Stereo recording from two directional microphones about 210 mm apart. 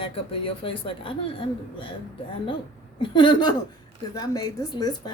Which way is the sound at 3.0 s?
20° left (ahead or behind).